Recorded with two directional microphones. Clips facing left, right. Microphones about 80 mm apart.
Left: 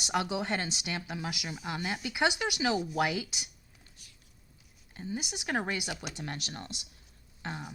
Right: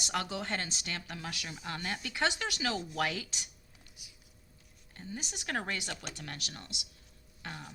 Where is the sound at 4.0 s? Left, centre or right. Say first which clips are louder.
Right 2 dB; centre.